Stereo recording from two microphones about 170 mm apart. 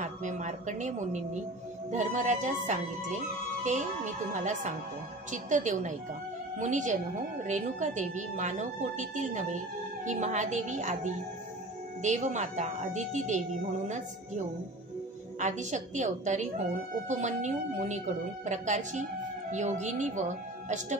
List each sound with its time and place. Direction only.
0.0 s a woman's voice: 45° right (ahead or behind)
12.0 s a woman's voice: 45° right (ahead or behind)